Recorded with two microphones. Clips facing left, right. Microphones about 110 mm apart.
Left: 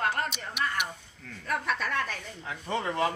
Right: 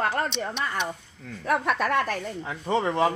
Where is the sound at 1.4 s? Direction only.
70° right (ahead or behind).